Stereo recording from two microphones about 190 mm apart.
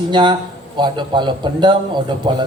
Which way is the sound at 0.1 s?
25° right (ahead or behind).